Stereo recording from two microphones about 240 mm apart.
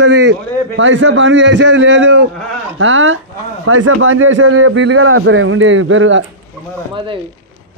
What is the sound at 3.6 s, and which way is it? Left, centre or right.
A man's voice, right.